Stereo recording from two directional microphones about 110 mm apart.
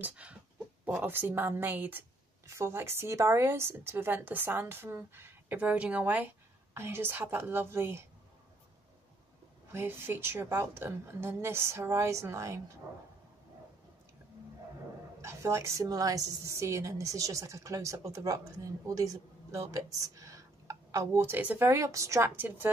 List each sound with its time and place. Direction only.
0.0 s a woman's voice: 10° right (ahead or behind)
9.7 s a woman's voice: 20° right (ahead or behind)
15.2 s a woman's voice: 25° right (ahead or behind)